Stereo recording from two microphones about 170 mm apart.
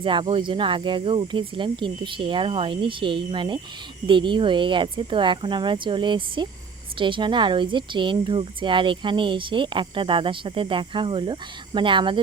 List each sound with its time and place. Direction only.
0.0 s speech: 30° right (ahead or behind)